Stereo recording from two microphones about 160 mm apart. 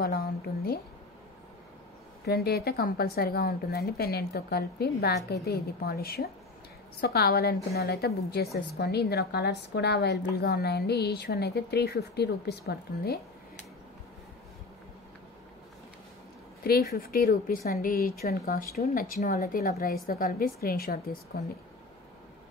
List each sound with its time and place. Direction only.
0.0 s a sound: 70° left (ahead or behind)
2.2 s a woman's voice: 85° left
8.7 s a woman's voice: 90° left
16.9 s a woman's voice: 65° left (ahead or behind)